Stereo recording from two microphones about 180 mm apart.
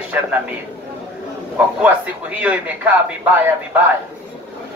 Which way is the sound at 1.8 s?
5° right (ahead or behind).